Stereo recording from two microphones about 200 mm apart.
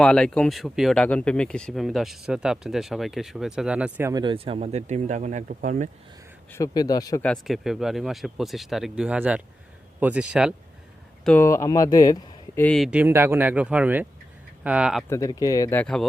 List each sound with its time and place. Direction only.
0.0 s speech: 5° left (ahead or behind)
4.1 s speech: 25° right (ahead or behind); by 5.9 s 40° right (ahead or behind)
6.5 s speech: 20° left (ahead or behind)
7.3 s speech: centre (ahead or behind)
11.2 s speech: 10° left (ahead or behind)
12.6 s speech: centre (ahead or behind)
15.1 s speech: 15° left (ahead or behind)